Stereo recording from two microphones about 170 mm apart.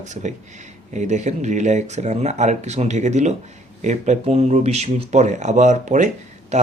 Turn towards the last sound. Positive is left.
turn(degrees=-40)  # may be behind; listen again after turning